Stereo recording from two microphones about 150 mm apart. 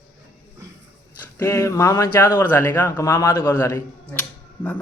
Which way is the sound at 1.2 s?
15° left (ahead or behind).